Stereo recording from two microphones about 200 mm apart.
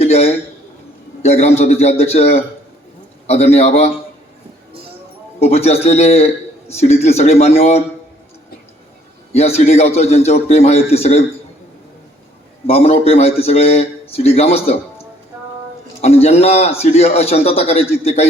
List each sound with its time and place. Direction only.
0.0 s a sound: 30° left (ahead or behind)
1.2 s a man's voice: 35° left (ahead or behind)
5.4 s a man's voice: 30° left (ahead or behind)
9.3 s a man's voice: 30° left (ahead or behind)
12.6 s a man's voice: 30° left (ahead or behind)
16.0 s a man's voice: 30° left (ahead or behind)